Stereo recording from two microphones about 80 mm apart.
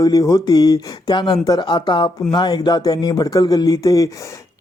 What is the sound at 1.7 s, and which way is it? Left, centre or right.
Speech, left.